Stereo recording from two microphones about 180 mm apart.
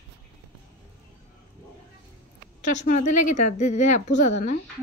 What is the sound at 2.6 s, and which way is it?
Speech, 45° left (ahead or behind).